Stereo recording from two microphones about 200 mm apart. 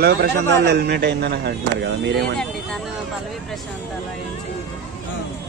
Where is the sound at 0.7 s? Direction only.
55° right (ahead or behind).